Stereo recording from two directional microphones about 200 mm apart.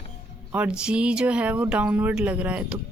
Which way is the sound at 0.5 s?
5° right (ahead or behind).